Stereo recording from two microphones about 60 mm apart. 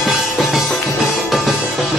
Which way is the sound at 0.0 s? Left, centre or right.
Centre.